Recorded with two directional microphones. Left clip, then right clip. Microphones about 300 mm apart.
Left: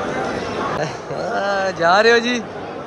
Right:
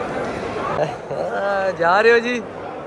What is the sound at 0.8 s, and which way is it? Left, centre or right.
Speech, centre.